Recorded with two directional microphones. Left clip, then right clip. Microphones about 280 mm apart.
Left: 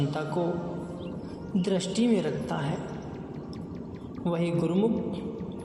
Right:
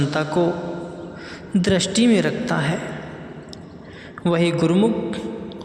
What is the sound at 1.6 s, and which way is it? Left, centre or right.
Speech, right.